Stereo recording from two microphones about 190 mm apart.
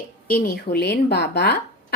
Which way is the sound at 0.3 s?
55° left (ahead or behind).